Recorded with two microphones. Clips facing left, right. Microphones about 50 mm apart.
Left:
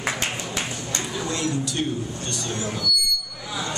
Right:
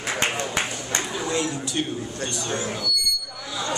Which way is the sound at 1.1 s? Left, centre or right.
Centre.